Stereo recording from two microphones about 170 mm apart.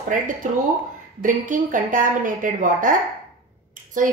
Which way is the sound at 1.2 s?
50° right (ahead or behind).